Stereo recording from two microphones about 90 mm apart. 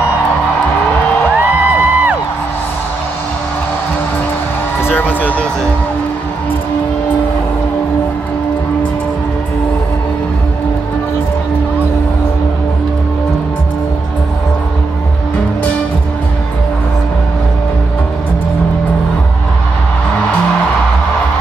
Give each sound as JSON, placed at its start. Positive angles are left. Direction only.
{"t": 1.4, "sound": "music", "side_deg": -20}
{"t": 4.8, "sound": "music", "side_deg": 20}